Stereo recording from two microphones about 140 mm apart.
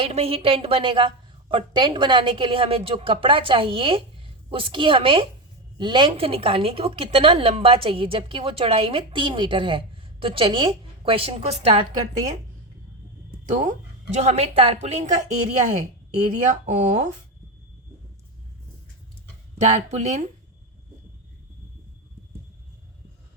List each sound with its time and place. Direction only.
0.0 s a woman's voice: 45° right (ahead or behind)
13.4 s a woman's voice: 60° right (ahead or behind)
19.5 s a woman's voice: 50° right (ahead or behind)